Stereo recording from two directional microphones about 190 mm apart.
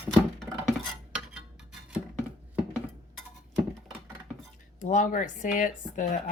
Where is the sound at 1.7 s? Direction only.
5° right (ahead or behind).